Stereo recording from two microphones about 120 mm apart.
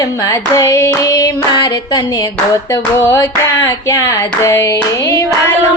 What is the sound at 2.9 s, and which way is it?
Hands, 25° left (ahead or behind).